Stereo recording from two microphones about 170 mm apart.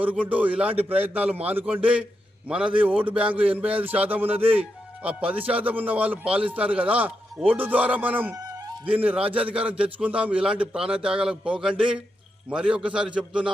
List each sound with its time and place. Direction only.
0.2 s speech: 10° right (ahead or behind)
8.4 s music: 20° right (ahead or behind)
8.9 s a man's voice: 10° right (ahead or behind)